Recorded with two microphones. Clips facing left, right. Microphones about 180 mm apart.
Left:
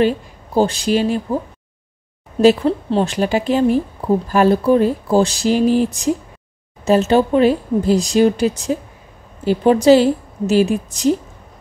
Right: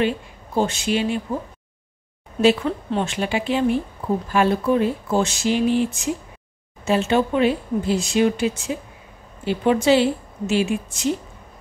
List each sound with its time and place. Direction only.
0.6 s speech: 35° left (ahead or behind)
2.4 s speech: 35° left (ahead or behind)